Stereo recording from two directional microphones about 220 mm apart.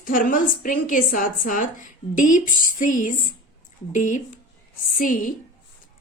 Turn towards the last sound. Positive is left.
turn(degrees=40)  # may be behind; listen again after turning